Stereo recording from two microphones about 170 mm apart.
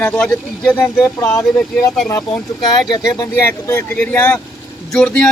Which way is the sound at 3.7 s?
5° left (ahead or behind).